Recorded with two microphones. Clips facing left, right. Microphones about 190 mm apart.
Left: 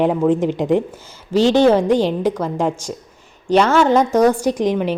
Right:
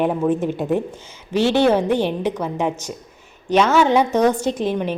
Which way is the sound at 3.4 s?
10° left (ahead or behind).